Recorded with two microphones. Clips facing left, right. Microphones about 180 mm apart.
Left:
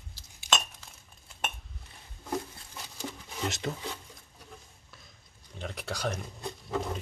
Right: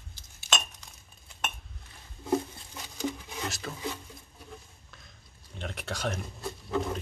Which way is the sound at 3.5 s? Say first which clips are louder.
Left 5 dB; 20° left (ahead or behind).